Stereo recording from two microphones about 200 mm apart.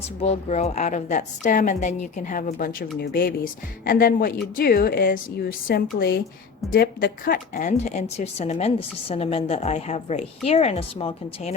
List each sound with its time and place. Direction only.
0.2 s speech: 30° left (ahead or behind)